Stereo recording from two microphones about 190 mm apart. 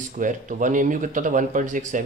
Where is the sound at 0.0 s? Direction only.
45° right (ahead or behind).